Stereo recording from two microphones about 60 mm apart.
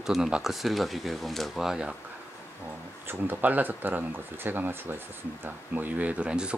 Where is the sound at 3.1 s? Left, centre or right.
Right.